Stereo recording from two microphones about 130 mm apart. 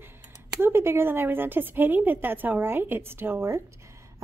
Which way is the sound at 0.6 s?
20° right (ahead or behind).